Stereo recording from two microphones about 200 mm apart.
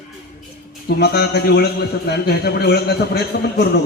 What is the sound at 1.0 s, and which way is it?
A man's voice, 55° left (ahead or behind).